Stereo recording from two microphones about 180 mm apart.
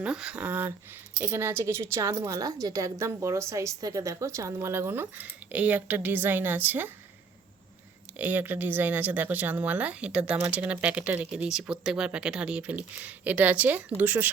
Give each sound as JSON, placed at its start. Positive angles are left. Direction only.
{"t": 0.0, "sound": "a woman's voice", "side_deg": -5}
{"t": 8.1, "sound": "a woman's voice", "side_deg": -10}